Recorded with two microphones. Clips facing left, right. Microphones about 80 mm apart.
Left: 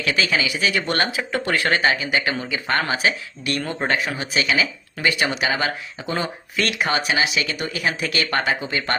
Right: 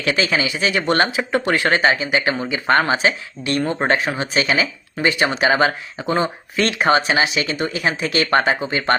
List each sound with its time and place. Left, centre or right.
0.0 s speech: right